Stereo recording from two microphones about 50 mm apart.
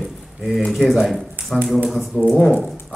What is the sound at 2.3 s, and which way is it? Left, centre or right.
Speech, left.